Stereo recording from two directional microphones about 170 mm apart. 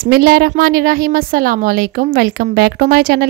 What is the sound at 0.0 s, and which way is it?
Speech, 65° right (ahead or behind).